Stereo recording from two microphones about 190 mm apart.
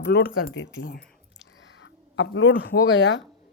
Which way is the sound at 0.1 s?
85° left.